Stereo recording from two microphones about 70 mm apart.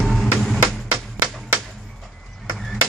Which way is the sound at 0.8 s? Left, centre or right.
Right.